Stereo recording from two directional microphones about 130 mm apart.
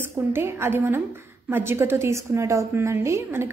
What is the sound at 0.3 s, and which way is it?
A woman's voice, 20° right (ahead or behind).